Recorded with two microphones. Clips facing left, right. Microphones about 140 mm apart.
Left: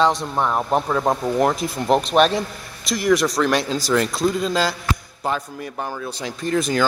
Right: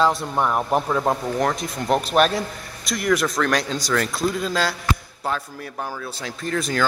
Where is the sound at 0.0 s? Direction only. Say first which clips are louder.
Left 1 dB; 5° right (ahead or behind).